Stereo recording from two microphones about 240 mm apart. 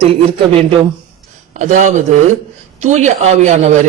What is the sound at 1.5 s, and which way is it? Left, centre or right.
A man's voice, right.